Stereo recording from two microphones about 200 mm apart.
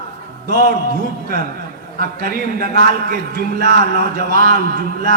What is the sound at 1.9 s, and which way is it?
A man's voice, 50° right (ahead or behind).